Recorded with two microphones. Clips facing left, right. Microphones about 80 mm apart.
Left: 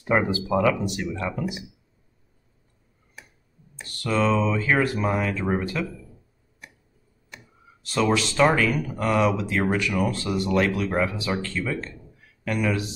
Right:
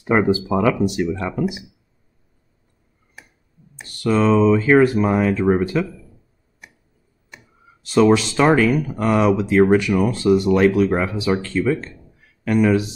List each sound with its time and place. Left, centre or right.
0.0 s speech: centre
3.7 s speech: right
7.8 s speech: right